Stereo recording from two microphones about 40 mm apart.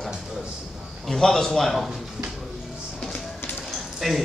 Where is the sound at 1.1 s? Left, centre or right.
Centre.